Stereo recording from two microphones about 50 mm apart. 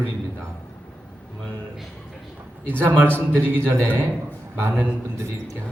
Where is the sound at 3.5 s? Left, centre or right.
Right.